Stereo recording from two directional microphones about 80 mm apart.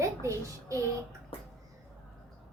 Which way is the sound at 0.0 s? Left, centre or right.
Right.